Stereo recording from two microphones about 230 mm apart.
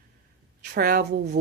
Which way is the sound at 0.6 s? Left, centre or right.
Right.